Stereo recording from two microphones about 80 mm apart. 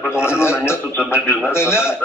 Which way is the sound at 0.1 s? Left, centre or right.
Left.